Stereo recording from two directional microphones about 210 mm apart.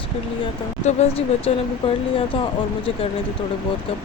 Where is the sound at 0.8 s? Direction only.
30° left (ahead or behind).